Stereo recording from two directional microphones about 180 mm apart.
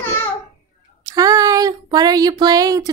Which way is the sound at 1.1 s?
20° right (ahead or behind).